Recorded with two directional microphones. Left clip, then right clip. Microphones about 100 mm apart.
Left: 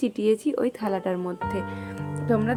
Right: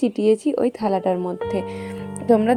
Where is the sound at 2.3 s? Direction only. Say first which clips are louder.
Right 8 dB; 90° right.